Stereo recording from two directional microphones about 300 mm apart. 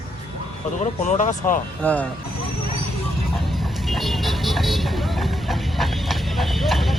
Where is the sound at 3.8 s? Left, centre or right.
Centre.